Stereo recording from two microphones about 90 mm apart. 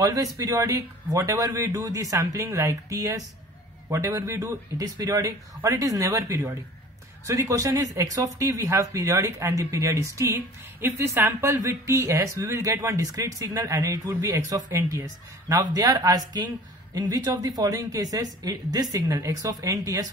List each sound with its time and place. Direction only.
0.0 s speech: 40° right (ahead or behind)
14.0 s speech: 25° right (ahead or behind)